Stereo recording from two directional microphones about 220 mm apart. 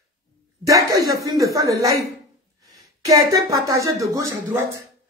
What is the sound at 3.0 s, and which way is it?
Speech, 15° right (ahead or behind).